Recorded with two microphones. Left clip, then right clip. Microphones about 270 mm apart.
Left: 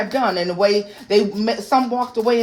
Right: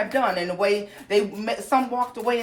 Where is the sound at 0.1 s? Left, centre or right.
Left.